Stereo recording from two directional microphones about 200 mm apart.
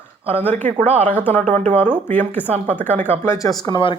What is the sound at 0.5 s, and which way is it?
Speech, 35° right (ahead or behind).